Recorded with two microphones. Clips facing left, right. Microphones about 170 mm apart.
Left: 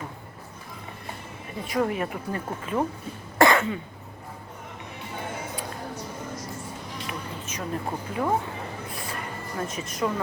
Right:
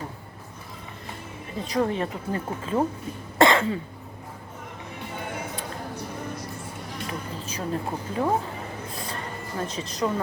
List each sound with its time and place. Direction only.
1.7 s speech: 25° right (ahead or behind)
3.3 s cough: 25° right (ahead or behind)
7.1 s speech: 30° right (ahead or behind)
9.6 s speech: 30° right (ahead or behind)